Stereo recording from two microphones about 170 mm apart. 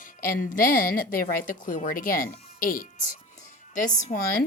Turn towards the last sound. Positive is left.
turn(degrees=45)  # may be behind; listen again after turning